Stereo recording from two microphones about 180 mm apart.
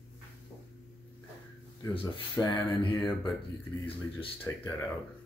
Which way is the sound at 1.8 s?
25° left (ahead or behind).